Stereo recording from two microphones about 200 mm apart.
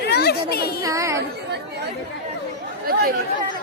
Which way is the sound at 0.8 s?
15° right (ahead or behind).